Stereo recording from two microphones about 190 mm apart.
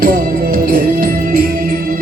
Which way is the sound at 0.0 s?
50° right (ahead or behind).